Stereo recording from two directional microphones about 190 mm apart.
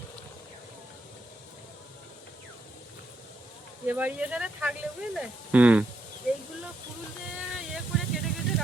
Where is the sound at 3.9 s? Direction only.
10° right (ahead or behind).